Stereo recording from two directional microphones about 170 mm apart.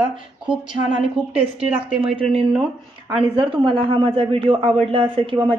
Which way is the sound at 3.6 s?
30° right (ahead or behind).